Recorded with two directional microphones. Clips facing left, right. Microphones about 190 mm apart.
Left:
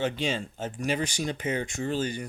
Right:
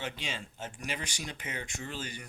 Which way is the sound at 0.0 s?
30° left (ahead or behind).